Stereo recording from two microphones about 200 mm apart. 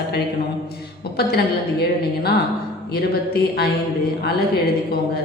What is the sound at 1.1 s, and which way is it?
Speech, 55° left (ahead or behind).